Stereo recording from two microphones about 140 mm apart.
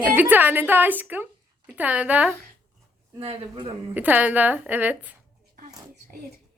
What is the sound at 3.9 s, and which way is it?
A woman's voice, 10° right (ahead or behind).